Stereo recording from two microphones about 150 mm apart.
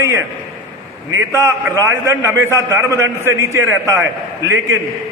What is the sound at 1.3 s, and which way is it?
A man's voice, 20° right (ahead or behind).